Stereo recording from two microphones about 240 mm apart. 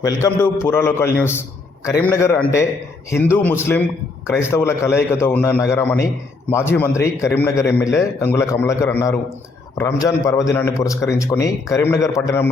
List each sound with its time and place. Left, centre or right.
0.0 s a man's voice: centre